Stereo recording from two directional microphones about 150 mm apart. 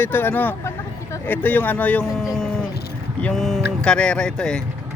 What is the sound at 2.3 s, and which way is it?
Music, 5° left (ahead or behind).